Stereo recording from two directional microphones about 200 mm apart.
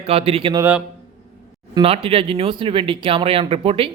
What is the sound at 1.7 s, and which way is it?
Speech, 30° right (ahead or behind).